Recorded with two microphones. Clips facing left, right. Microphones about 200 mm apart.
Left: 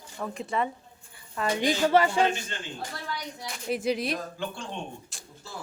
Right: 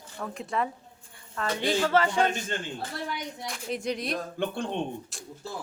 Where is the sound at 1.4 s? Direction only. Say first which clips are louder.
Left 1 dB; 15° left (ahead or behind).